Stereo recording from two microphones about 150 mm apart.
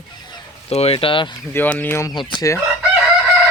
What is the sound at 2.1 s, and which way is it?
Speech, 30° left (ahead or behind).